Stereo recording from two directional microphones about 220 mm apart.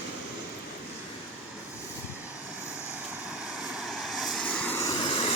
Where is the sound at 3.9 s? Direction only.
Centre (ahead or behind); by 5.3 s 25° left (ahead or behind).